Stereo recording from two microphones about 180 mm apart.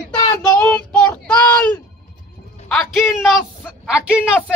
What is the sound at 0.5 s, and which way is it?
Child singing, 5° left (ahead or behind).